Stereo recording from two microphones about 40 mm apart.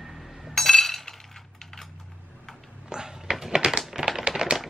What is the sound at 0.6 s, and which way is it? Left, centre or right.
Chink, centre.